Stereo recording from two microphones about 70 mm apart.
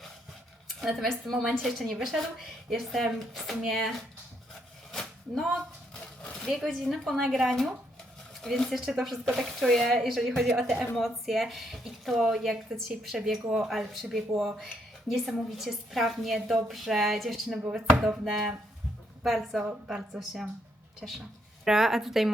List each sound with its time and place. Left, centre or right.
0.8 s speech: centre
4.9 s a sound: centre
6.7 s speech: centre
17.7 s chopping: centre
19.2 s speech: centre
19.6 s chopping: centre
20.1 s speech: centre